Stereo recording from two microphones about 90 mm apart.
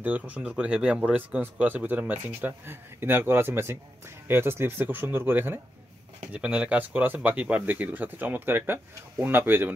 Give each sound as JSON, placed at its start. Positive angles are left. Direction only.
{"t": 0.0, "sound": "speech", "side_deg": -15}
{"t": 6.3, "sound": "speech", "side_deg": -15}